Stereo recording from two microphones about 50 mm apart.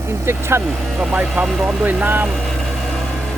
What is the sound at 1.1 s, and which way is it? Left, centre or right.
Speech, right.